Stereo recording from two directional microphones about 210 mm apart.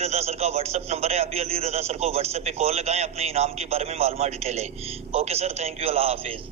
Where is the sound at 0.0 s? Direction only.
30° right (ahead or behind).